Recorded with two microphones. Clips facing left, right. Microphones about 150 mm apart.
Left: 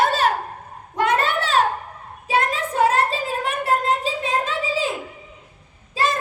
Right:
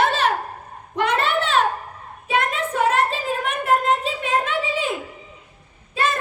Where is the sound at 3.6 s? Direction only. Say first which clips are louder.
Right 2 dB; 35° left (ahead or behind).